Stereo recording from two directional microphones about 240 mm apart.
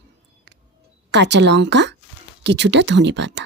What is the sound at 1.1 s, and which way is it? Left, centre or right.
Speech, right.